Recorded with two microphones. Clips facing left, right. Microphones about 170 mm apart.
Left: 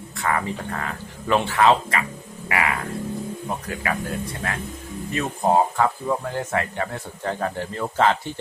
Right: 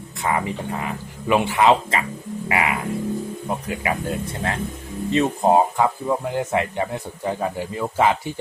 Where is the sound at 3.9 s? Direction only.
20° right (ahead or behind).